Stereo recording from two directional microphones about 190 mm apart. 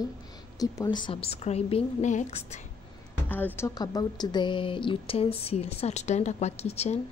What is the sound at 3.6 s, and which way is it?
A woman's voice, 20° left (ahead or behind).